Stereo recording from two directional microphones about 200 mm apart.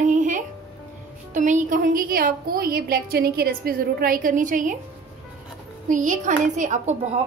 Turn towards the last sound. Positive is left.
turn(degrees=-35)  # may be behind; listen again after turning